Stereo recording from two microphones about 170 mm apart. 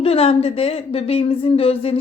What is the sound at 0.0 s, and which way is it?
Speech, 35° left (ahead or behind).